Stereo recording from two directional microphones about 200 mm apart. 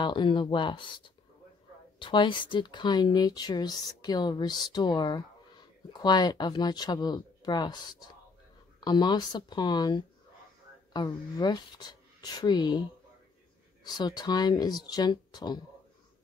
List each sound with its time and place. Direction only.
0.0 s speech: 25° left (ahead or behind)
11.3 s speech: 20° left (ahead or behind)
13.8 s speech: 20° left (ahead or behind)